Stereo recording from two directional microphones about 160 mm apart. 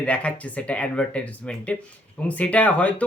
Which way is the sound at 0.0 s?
10° left (ahead or behind).